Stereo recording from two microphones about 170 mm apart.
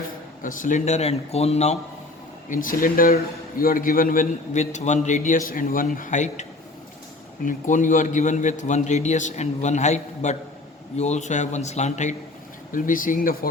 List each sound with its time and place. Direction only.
0.4 s a man's voice: 50° left (ahead or behind)
2.5 s a man's voice: 55° left (ahead or behind)
7.4 s a man's voice: 50° left (ahead or behind)